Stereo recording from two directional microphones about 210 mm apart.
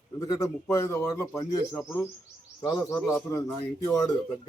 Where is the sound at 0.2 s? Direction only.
15° left (ahead or behind).